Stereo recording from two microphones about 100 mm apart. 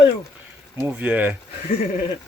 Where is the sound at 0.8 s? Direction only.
15° right (ahead or behind).